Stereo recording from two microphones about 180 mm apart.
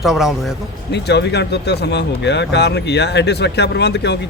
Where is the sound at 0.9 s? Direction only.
70° left (ahead or behind).